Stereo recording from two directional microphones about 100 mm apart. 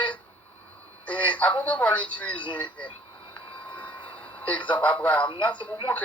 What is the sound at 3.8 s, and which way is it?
Vehicle, 15° left (ahead or behind).